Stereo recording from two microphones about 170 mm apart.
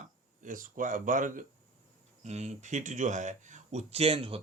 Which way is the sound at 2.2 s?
40° right (ahead or behind).